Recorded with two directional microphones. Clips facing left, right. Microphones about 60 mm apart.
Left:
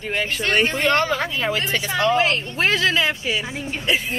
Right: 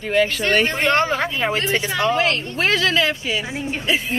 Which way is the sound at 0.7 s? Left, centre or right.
Right.